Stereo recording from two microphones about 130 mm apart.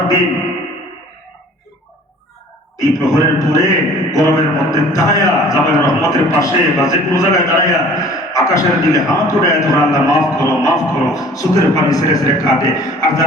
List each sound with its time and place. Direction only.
2.7 s a man's voice: 25° left (ahead or behind)